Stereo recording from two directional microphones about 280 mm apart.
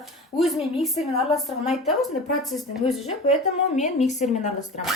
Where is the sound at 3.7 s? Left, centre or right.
Left.